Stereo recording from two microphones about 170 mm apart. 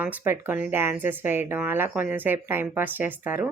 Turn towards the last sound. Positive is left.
turn(degrees=-10)  # may be behind; listen again after turning